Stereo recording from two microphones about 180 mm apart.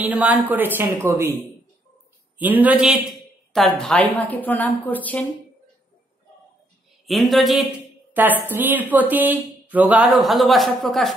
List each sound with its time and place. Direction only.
0.0 s speech: 10° right (ahead or behind)
2.3 s a woman's voice: 10° right (ahead or behind); by 5.2 s 10° left (ahead or behind)
7.1 s a woman's voice: centre (ahead or behind)